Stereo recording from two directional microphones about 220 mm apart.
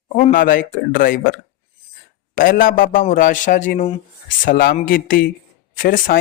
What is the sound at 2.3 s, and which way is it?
A man's voice, 40° left (ahead or behind).